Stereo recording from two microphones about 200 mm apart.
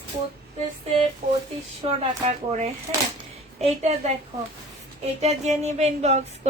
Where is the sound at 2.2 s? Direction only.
35° right (ahead or behind).